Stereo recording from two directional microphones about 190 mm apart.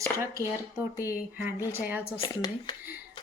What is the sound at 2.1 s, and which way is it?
Speech, 25° left (ahead or behind).